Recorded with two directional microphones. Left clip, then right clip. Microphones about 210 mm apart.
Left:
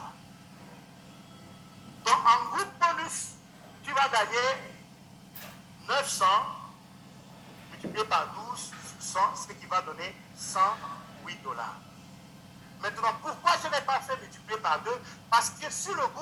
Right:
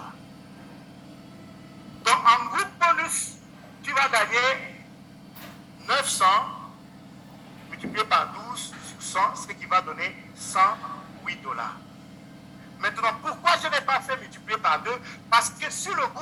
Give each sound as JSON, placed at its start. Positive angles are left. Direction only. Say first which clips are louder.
{"t": 2.0, "sound": "speech", "louder": "right 4 dB", "side_deg": -15}
{"t": 5.8, "sound": "speech", "louder": "right 5 dB", "side_deg": -15}
{"t": 7.9, "sound": "a man's voice", "louder": "right 5 dB", "side_deg": -15}
{"t": 11.3, "sound": "speech", "louder": "right 6 dB", "side_deg": -15}
{"t": 12.8, "sound": "speech", "louder": "right 4 dB", "side_deg": -15}